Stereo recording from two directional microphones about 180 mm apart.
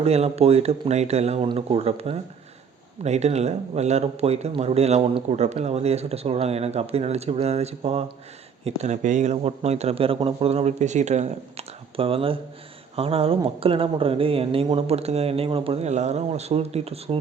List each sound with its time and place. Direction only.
0.0 s speech: 35° right (ahead or behind)